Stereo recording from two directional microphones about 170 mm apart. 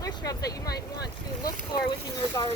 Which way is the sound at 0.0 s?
20° left (ahead or behind).